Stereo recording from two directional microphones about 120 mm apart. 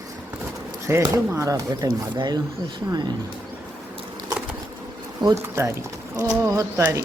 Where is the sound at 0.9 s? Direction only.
20° right (ahead or behind).